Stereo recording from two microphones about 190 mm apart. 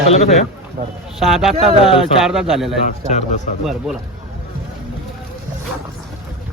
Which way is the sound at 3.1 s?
40° left (ahead or behind).